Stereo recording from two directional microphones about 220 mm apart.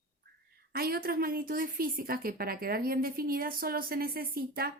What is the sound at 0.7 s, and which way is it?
A woman's voice, 45° right (ahead or behind).